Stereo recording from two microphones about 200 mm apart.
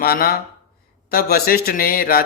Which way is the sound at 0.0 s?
50° left (ahead or behind).